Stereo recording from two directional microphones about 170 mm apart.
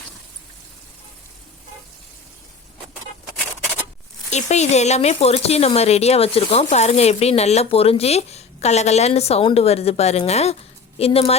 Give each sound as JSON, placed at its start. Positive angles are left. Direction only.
{"t": 4.3, "sound": "speech", "side_deg": 40}